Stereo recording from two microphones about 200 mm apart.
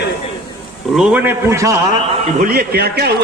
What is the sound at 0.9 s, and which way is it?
Speech, 5° right (ahead or behind).